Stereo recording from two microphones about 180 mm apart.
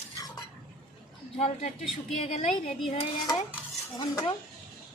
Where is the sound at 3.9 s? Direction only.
25° left (ahead or behind).